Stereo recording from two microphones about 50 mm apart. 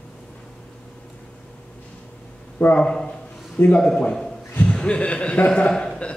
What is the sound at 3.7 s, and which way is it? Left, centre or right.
A man's voice, centre.